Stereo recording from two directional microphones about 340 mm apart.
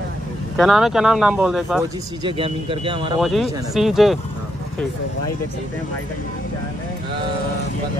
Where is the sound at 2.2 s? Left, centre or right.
Centre.